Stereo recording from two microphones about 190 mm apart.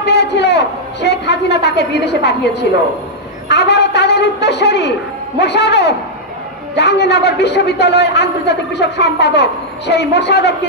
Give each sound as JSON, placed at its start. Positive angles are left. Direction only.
{"t": 0.0, "sound": "a man's voice", "side_deg": 65}
{"t": 3.4, "sound": "a sound", "side_deg": 60}
{"t": 5.4, "sound": "a man's voice", "side_deg": 60}